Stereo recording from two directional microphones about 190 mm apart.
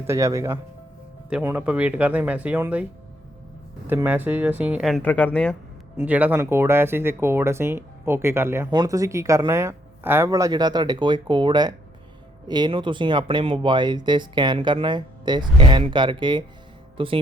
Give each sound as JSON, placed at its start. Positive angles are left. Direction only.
{"t": 0.1, "sound": "speech", "side_deg": -15}
{"t": 3.8, "sound": "speech", "side_deg": -10}
{"t": 6.0, "sound": "speech", "side_deg": -10}